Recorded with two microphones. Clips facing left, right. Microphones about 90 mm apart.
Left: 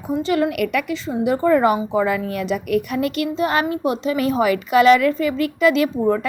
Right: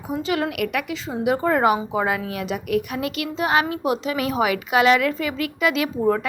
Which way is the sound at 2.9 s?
45° left (ahead or behind).